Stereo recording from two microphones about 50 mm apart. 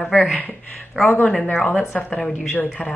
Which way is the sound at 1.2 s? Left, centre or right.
Left.